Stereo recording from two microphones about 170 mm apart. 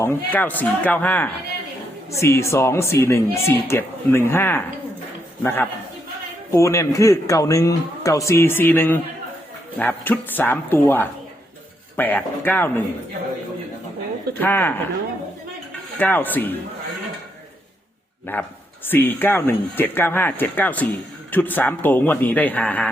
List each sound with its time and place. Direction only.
0.0 s a man's voice: 10° left (ahead or behind)
14.3 s speech: 10° left (ahead or behind)
16.0 s speech: 10° left (ahead or behind)
18.3 s speech: 10° left (ahead or behind)